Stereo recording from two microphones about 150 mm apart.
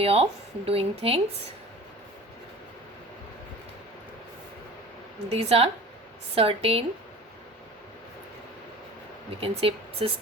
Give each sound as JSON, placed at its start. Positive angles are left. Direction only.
{"t": 0.0, "sound": "speech", "side_deg": -40}
{"t": 5.3, "sound": "speech", "side_deg": -40}
{"t": 9.4, "sound": "speech", "side_deg": -40}